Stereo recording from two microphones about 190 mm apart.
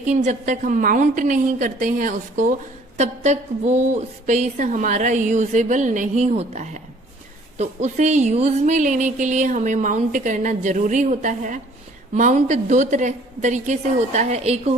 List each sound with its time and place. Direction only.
0.0 s a woman's voice: 40° right (ahead or behind)